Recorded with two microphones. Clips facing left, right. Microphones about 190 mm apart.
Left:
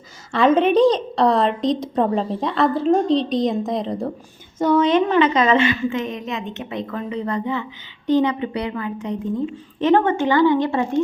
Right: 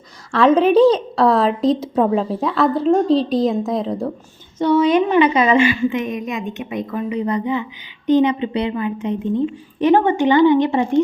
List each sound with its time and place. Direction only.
0.3 s a woman's voice: centre (ahead or behind); by 11.0 s 20° right (ahead or behind)